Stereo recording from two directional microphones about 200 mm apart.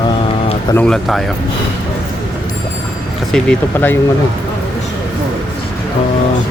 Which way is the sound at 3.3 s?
5° left (ahead or behind).